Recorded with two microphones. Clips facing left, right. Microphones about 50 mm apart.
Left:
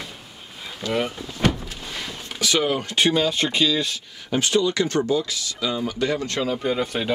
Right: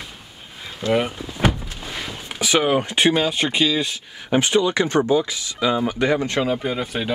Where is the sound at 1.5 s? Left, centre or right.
Centre.